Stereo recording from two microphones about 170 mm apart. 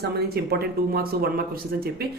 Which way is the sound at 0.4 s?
70° right (ahead or behind).